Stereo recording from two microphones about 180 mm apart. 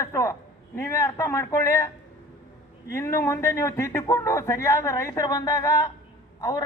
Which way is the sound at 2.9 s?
15° left (ahead or behind).